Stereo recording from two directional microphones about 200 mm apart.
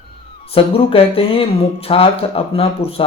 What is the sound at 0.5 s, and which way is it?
Speech, 30° left (ahead or behind).